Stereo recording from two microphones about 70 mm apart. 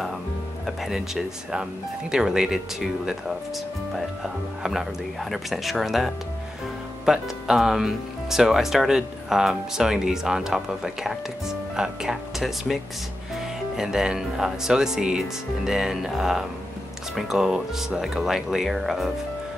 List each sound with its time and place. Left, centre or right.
0.7 s speech: centre